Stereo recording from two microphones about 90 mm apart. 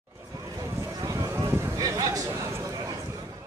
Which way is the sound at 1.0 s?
35° right (ahead or behind).